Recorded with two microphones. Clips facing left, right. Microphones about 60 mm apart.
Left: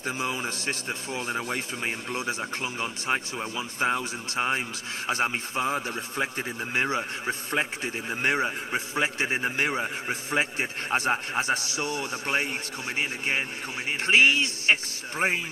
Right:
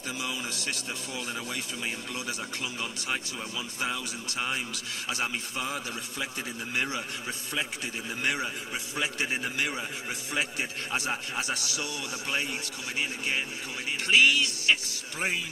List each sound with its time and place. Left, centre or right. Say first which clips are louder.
0.0 s speech: left 5 dB; left